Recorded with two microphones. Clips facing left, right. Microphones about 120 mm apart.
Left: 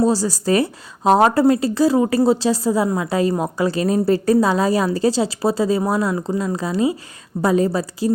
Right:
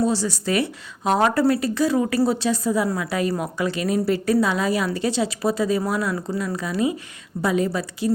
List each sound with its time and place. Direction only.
0.0 s speech: 40° left (ahead or behind)